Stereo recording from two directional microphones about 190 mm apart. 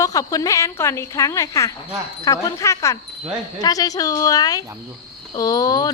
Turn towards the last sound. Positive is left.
turn(degrees=20)  # may be behind; listen again after turning